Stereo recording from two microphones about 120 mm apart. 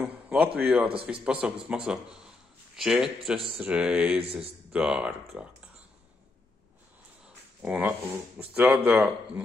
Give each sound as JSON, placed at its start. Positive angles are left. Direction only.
{"t": 0.0, "sound": "a man's voice", "side_deg": -10}
{"t": 4.2, "sound": "speech", "side_deg": -55}
{"t": 4.7, "sound": "speech", "side_deg": -5}
{"t": 7.6, "sound": "speech", "side_deg": -10}